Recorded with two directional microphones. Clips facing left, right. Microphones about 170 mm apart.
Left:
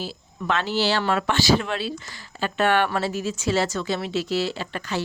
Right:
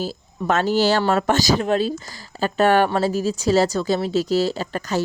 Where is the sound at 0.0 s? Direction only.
45° right (ahead or behind).